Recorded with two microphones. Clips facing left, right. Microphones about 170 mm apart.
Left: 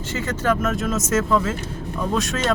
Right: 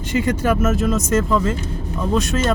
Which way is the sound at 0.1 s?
15° right (ahead or behind).